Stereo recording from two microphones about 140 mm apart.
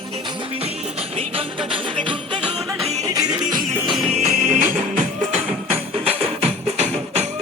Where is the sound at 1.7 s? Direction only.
40° right (ahead or behind).